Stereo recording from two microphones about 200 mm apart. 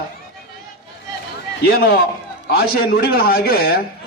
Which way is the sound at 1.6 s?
50° left (ahead or behind).